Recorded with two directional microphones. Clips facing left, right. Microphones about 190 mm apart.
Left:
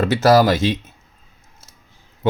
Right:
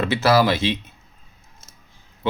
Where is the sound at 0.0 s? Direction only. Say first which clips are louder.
Left 4 dB; 45° left (ahead or behind).